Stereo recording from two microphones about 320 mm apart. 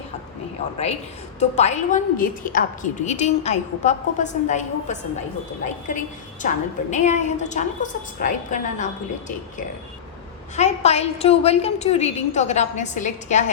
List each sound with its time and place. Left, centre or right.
0.6 s a woman's voice: centre
6.4 s a woman's voice: left
10.5 s a woman's voice: left